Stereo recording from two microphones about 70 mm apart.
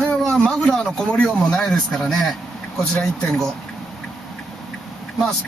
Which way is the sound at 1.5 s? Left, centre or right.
Centre.